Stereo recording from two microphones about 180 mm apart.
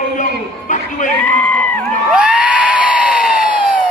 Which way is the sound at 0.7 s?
45° left (ahead or behind).